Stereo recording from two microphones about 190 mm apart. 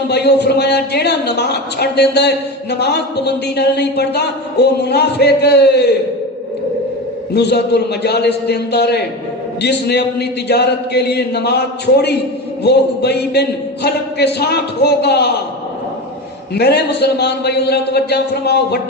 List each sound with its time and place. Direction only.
0.1 s speech: 60° left (ahead or behind)
7.3 s speech: 60° left (ahead or behind)
16.6 s speech: 60° left (ahead or behind)